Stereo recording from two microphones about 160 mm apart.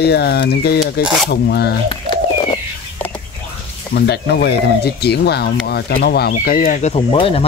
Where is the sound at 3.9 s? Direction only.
90° left.